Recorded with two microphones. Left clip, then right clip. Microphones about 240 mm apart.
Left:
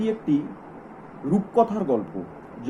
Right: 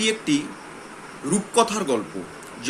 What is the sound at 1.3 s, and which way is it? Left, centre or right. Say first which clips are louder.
Speech: right 1 dB; right.